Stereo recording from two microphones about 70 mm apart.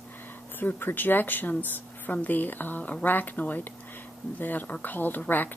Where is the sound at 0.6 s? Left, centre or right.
Left.